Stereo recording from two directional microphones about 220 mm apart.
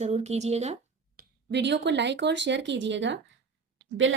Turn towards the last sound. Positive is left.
turn(degrees=-60)  # may be behind; listen again after turning